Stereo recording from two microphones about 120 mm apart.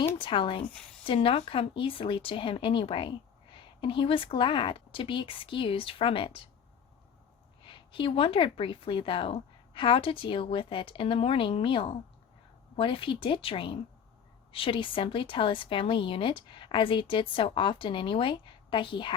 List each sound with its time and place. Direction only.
0.2 s a woman's voice: 45° left (ahead or behind)
7.6 s a woman's voice: 45° left (ahead or behind)